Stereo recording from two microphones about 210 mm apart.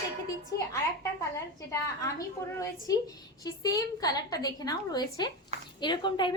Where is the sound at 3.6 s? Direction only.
15° left (ahead or behind).